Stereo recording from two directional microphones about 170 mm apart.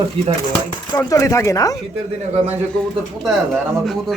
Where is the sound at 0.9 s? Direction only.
20° left (ahead or behind).